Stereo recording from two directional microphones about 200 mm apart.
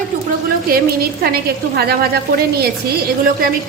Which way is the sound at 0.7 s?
50° right (ahead or behind).